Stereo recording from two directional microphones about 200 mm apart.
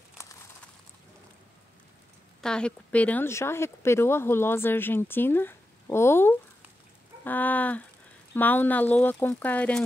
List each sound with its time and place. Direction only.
2.4 s speech: 5° left (ahead or behind)